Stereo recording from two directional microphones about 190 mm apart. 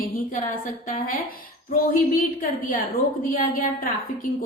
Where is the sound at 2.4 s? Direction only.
45° left (ahead or behind).